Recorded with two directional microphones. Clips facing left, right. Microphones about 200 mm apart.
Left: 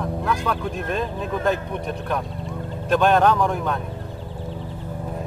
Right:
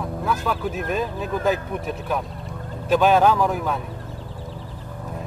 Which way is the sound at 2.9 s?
Centre (ahead or behind).